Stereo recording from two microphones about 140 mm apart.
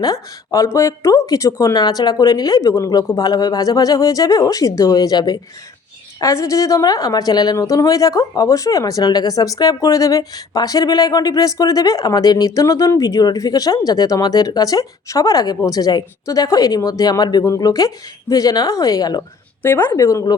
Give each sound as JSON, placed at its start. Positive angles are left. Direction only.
{"t": 0.0, "sound": "a woman's voice", "side_deg": 25}
{"t": 19.6, "sound": "a woman's voice", "side_deg": 15}